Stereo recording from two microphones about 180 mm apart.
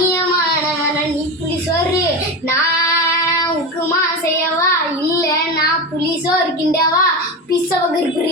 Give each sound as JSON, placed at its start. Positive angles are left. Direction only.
{"t": 6.2, "sound": "child singing", "side_deg": 15}